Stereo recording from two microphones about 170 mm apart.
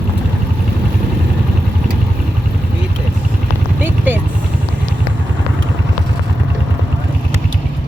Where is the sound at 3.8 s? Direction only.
10° right (ahead or behind).